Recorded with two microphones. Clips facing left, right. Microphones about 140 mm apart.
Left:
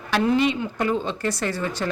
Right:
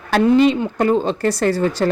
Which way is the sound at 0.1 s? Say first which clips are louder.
Right 7 dB; 35° right (ahead or behind).